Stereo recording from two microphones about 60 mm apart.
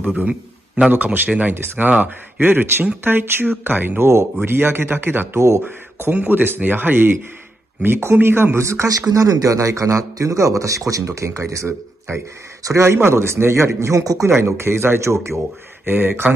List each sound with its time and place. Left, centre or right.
0.0 s a man's voice: right
7.8 s speech: right
8.6 s a man's voice: right
14.3 s a man's voice: right